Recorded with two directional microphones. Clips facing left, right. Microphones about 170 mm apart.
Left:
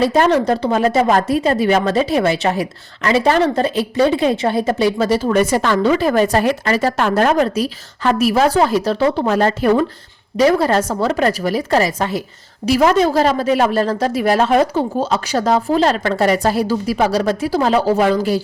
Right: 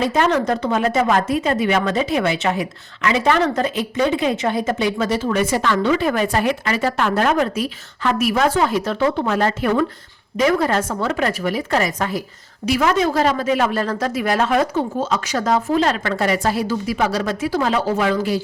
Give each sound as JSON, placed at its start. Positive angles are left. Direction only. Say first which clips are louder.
{"t": 0.0, "sound": "a woman's voice", "louder": "left 4 dB", "side_deg": 35}